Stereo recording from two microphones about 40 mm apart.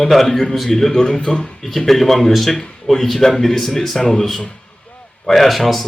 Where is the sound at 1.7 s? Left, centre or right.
Centre.